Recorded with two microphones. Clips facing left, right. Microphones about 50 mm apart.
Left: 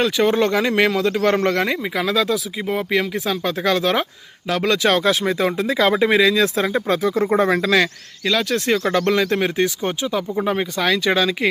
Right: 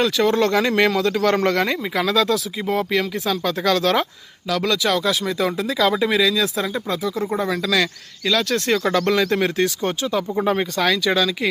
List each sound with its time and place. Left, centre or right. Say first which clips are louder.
0.0 s speech: left 1 dB; left
0.5 s speech: even; centre
4.4 s speech: left 2 dB; left
7.6 s speech: left 3 dB; left
8.2 s speech: even; centre
11.0 s speech: left 1 dB; left